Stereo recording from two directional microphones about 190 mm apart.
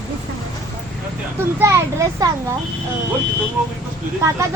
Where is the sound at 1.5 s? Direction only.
15° right (ahead or behind).